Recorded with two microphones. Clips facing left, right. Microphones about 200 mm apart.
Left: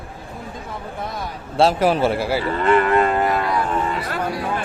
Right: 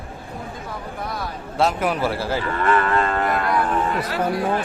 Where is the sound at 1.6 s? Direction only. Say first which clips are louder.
Left 4 dB; 30° left (ahead or behind).